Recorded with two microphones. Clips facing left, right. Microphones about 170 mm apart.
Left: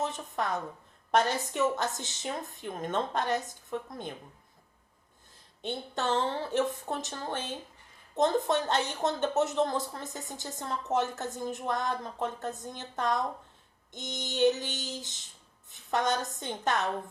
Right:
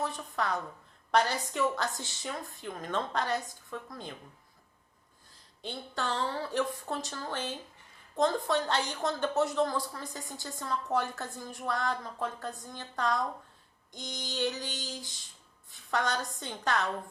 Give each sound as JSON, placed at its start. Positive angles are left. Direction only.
{"t": 0.0, "sound": "a woman's voice", "side_deg": 20}
{"t": 5.6, "sound": "a woman's voice", "side_deg": 20}